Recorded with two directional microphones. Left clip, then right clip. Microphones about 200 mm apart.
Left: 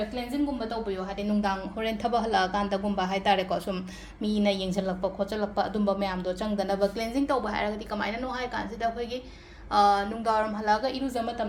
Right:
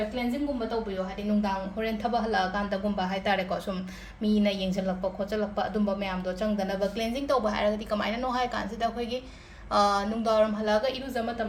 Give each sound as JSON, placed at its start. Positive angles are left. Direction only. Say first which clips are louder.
{"t": 1.4, "sound": "a woman's voice", "louder": "even", "side_deg": 40}